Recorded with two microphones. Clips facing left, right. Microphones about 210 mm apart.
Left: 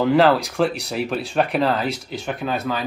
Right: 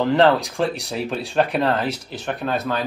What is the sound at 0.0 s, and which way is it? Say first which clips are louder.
Speech: left 1 dB; centre (ahead or behind).